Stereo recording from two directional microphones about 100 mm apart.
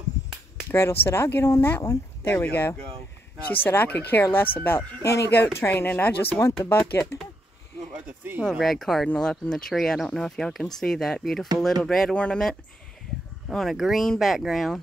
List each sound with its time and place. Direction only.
0.7 s speech: 25° left (ahead or behind)
7.9 s speech: 20° right (ahead or behind)
8.5 s speech: 5° left (ahead or behind)